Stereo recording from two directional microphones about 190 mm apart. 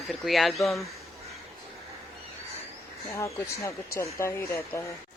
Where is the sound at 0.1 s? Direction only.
Centre (ahead or behind).